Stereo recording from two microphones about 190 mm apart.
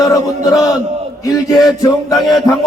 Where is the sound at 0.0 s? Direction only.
20° left (ahead or behind).